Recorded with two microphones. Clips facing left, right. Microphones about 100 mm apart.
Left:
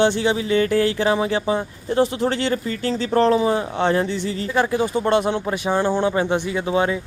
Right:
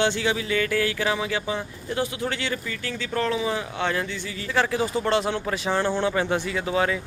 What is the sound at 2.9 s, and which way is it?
Speech, 25° left (ahead or behind).